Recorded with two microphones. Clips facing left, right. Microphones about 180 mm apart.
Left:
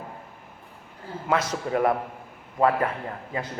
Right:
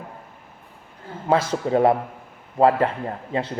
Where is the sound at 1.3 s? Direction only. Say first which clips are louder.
Right 5 dB; 30° right (ahead or behind).